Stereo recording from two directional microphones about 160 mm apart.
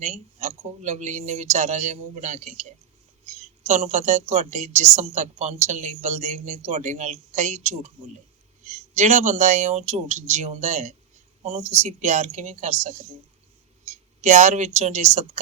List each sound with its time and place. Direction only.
0.0 s a woman's voice: 45° right (ahead or behind)